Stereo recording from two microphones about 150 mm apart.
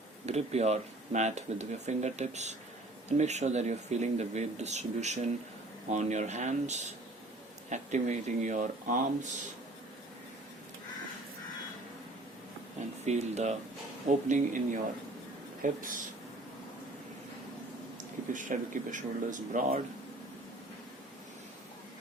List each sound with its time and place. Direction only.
0.3 s speech: 45° right (ahead or behind)
13.1 s speech: 50° right (ahead or behind)
18.3 s speech: 60° right (ahead or behind)